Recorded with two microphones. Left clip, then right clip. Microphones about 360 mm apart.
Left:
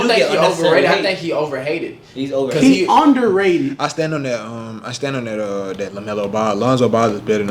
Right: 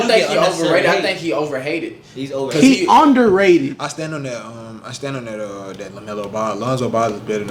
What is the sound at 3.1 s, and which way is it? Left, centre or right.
Speech, right.